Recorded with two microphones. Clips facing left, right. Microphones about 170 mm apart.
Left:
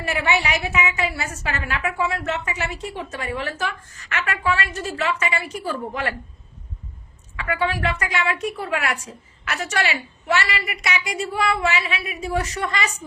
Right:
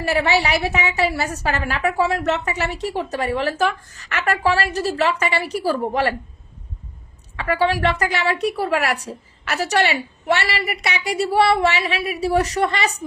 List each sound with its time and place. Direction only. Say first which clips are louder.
0.0 s a woman's voice: right 4 dB; 35° right (ahead or behind)
7.3 s a woman's voice: right 5 dB; 35° right (ahead or behind)
8.4 s a woman's voice: right 5 dB; 70° right (ahead or behind)
8.6 s a woman's voice: right 5 dB; 35° right (ahead or behind)